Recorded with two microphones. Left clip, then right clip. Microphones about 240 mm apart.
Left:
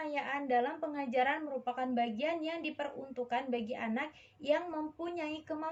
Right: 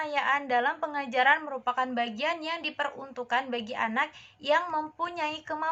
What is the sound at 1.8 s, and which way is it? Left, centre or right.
Speech, right.